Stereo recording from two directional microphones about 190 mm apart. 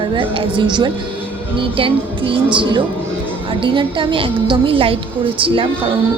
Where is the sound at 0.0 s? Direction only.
30° right (ahead or behind).